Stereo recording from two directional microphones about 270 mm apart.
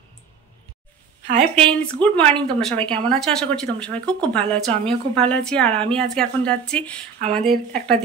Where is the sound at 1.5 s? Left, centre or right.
Centre.